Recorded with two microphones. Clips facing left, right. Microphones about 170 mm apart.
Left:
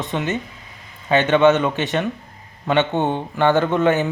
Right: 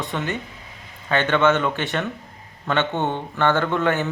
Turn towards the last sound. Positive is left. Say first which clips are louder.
# left 4 dB
turn(degrees=20)  # may be behind; listen again after turning